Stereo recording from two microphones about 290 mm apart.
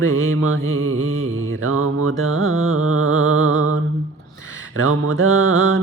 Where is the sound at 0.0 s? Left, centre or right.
Right.